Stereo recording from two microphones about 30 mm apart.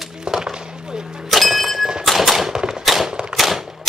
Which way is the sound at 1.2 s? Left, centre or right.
Centre.